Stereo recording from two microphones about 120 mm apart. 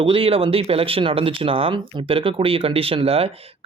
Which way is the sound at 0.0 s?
50° right (ahead or behind).